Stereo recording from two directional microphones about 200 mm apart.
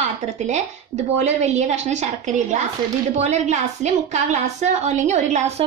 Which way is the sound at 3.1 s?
35° right (ahead or behind).